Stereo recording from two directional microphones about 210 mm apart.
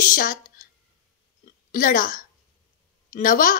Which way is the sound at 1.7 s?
40° left (ahead or behind).